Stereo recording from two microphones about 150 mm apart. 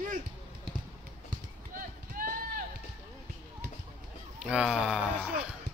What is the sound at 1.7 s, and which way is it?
Run, 70° right (ahead or behind).